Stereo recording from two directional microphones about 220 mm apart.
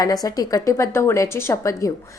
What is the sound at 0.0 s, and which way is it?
A woman's voice, 15° left (ahead or behind).